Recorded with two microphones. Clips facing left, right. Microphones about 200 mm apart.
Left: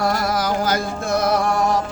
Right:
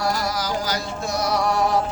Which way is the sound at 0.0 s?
55° left (ahead or behind).